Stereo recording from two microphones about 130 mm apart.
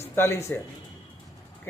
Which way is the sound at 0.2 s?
20° left (ahead or behind).